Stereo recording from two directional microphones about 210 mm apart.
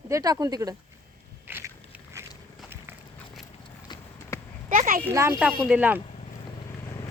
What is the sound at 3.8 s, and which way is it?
Clip-clop, 20° left (ahead or behind).